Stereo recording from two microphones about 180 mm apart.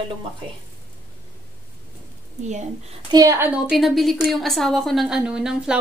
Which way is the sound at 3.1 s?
15° right (ahead or behind).